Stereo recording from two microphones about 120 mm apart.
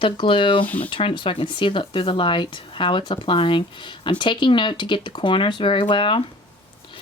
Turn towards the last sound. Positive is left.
turn(degrees=45)  # may be behind; listen again after turning